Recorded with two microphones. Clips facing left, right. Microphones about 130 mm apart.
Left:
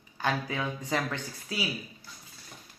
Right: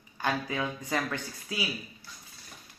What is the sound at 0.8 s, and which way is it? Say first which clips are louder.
Speech: even; 25° left (ahead or behind).